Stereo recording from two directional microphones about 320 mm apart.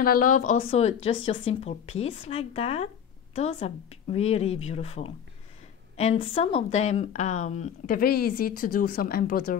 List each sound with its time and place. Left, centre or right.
0.0 s speech: left